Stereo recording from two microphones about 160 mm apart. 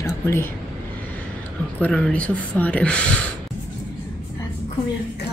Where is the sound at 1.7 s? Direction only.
10° left (ahead or behind).